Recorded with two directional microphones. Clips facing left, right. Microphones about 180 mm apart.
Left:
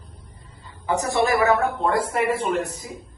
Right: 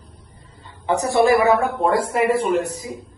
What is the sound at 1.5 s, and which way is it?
Speech, centre (ahead or behind).